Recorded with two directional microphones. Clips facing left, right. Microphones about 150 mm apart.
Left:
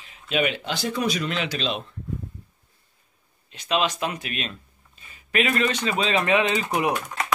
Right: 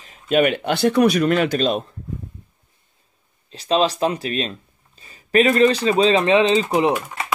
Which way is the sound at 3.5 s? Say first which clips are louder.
Right 6 dB; 35° right (ahead or behind).